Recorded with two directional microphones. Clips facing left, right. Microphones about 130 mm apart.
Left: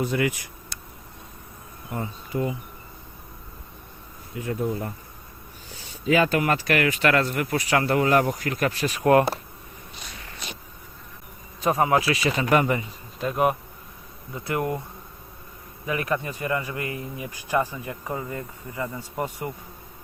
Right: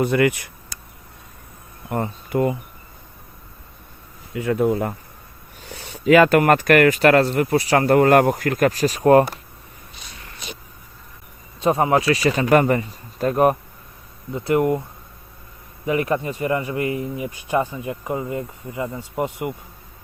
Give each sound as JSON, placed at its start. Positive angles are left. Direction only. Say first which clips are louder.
{"t": 0.0, "sound": "speech", "louder": "right 6 dB", "side_deg": -65}
{"t": 1.9, "sound": "speech", "louder": "right 7 dB", "side_deg": -65}
{"t": 4.4, "sound": "speech", "louder": "right 8 dB", "side_deg": -80}
{"t": 5.6, "sound": "speech", "louder": "right 7 dB", "side_deg": -70}
{"t": 7.9, "sound": "speech", "louder": "right 8 dB", "side_deg": -50}
{"t": 11.6, "sound": "speech", "louder": "right 3 dB", "side_deg": -30}
{"t": 14.3, "sound": "speech", "louder": "right 8 dB", "side_deg": -25}
{"t": 15.9, "sound": "speech", "louder": "right 6 dB", "side_deg": -25}